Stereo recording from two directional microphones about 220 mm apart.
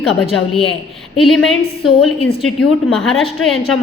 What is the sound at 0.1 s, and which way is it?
A woman's voice, centre (ahead or behind).